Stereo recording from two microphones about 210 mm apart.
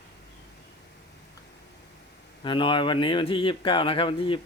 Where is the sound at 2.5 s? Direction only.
25° left (ahead or behind).